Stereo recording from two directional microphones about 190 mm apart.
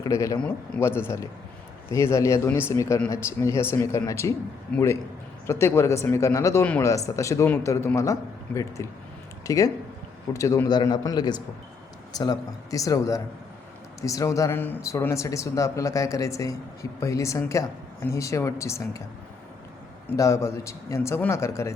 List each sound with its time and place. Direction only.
0.0 s speech: 15° left (ahead or behind)
0.3 s a man's voice: 5° left (ahead or behind)
20.1 s speech: 15° left (ahead or behind)